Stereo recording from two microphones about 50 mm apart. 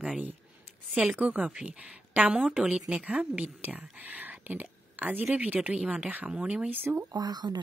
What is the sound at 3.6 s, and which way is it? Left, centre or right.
Speech, right.